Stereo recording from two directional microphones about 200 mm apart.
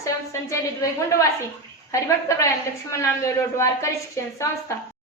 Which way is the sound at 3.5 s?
15° left (ahead or behind).